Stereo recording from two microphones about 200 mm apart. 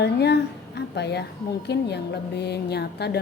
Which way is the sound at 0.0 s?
55° left (ahead or behind).